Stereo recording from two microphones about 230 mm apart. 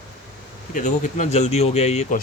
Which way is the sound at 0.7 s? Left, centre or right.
Left.